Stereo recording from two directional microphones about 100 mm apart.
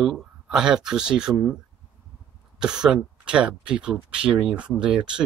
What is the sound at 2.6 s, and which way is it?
Speech, 10° right (ahead or behind).